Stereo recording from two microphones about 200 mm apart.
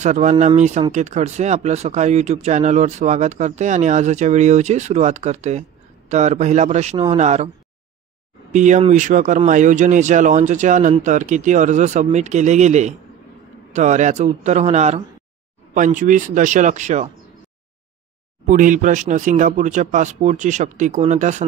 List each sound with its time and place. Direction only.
0.0 s speech: 35° right (ahead or behind)
8.5 s speech: 35° right (ahead or behind)
18.5 s speech: 40° right (ahead or behind)